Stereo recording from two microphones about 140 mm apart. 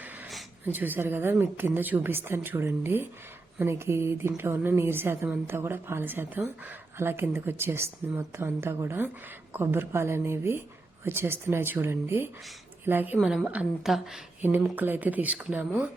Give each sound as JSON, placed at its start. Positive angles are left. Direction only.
{"t": 0.6, "sound": "a woman's voice", "side_deg": -15}
{"t": 14.4, "sound": "a woman's voice", "side_deg": -15}